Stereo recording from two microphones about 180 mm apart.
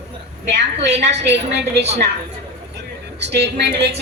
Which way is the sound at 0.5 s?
70° right (ahead or behind).